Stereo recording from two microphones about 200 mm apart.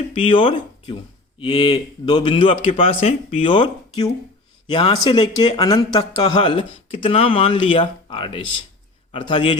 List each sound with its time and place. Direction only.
0.1 s speech: 25° left (ahead or behind)